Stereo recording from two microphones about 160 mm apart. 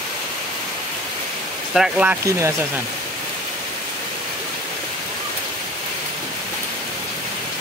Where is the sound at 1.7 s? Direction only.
5° right (ahead or behind).